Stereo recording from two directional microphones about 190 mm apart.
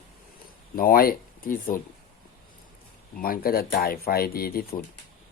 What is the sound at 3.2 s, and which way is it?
Speech, 50° left (ahead or behind).